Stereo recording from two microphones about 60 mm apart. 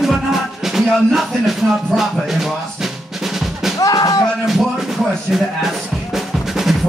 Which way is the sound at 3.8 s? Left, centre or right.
Left.